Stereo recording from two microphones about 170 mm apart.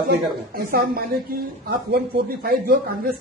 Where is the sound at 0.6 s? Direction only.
65° right (ahead or behind).